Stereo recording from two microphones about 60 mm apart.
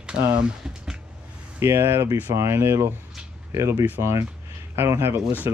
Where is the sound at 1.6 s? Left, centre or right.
Right.